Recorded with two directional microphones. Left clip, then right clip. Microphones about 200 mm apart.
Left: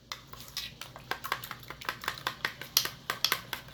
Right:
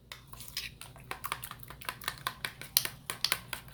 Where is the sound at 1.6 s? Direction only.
5° right (ahead or behind).